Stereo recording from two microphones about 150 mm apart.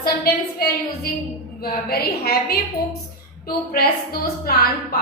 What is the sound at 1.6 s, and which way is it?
A woman's voice, 90° left.